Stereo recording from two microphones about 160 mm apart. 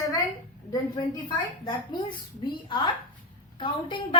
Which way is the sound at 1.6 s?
25° left (ahead or behind).